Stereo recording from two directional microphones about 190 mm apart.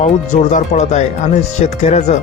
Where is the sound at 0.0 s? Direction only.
40° left (ahead or behind).